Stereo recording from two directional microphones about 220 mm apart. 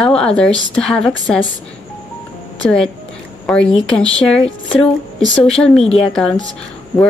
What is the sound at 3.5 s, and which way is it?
Speech, 5° left (ahead or behind).